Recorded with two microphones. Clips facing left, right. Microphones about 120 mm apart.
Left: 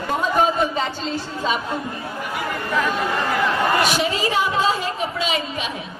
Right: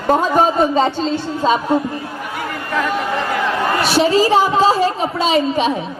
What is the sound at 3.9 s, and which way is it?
A woman's voice, 30° right (ahead or behind).